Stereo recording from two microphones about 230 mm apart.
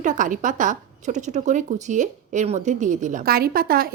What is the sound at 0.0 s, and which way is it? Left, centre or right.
A woman's voice, right.